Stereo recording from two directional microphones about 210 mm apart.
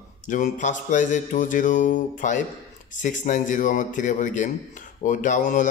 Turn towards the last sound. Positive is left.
turn(degrees=35)  # may be behind; listen again after turning